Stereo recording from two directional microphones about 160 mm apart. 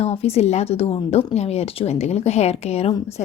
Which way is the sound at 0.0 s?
40° left (ahead or behind).